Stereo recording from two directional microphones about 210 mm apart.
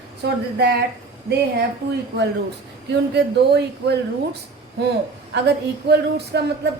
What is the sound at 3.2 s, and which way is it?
Speech, 50° right (ahead or behind).